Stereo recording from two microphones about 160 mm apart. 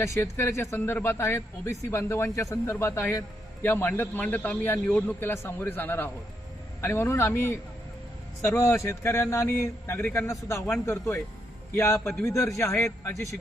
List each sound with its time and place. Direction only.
0.0 s a man's voice: 15° left (ahead or behind)